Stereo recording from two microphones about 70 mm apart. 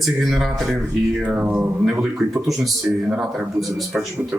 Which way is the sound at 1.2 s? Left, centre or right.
Centre.